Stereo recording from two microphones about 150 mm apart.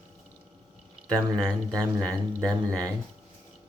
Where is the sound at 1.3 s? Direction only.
5° left (ahead or behind).